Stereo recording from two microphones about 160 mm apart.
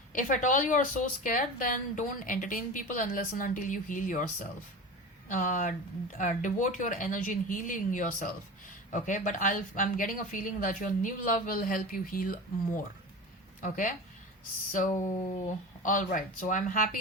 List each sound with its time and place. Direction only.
0.1 s a woman's voice: 55° left (ahead or behind)